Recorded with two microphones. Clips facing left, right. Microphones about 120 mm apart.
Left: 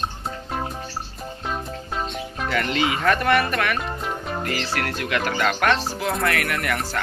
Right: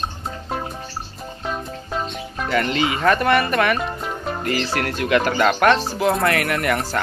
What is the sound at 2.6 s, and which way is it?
Speech, 5° left (ahead or behind).